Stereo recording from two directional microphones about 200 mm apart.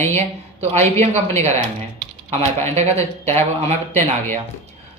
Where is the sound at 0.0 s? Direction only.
10° left (ahead or behind).